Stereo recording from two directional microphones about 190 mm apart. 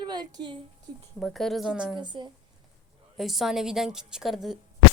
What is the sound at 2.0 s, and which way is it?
Speech, 25° right (ahead or behind).